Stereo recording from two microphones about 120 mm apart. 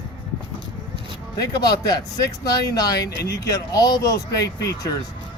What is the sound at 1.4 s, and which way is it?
Speech, 35° left (ahead or behind).